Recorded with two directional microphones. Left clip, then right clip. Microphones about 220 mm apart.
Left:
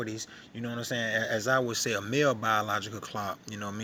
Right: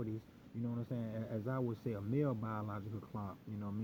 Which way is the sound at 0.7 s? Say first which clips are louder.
Left 17 dB; 20° left (ahead or behind).